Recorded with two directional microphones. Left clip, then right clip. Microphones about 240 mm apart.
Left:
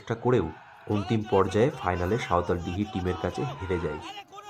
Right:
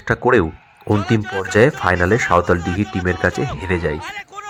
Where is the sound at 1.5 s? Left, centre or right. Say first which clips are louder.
Right 11 dB; centre.